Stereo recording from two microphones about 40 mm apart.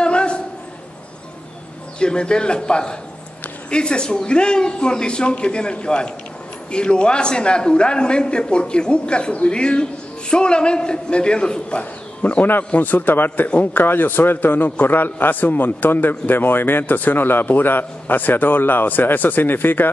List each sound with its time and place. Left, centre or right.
0.0 s a sound: left
2.0 s a man's voice: left
11.8 s a man's voice: left